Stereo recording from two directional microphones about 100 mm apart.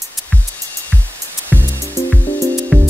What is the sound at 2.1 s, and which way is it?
Music, 15° left (ahead or behind).